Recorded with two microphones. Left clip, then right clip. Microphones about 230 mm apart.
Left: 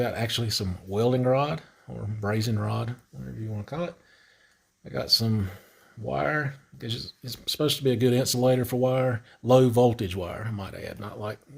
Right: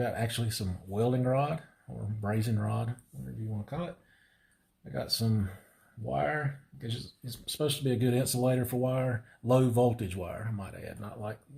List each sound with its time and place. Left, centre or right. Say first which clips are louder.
0.0 s speech: left 5 dB; left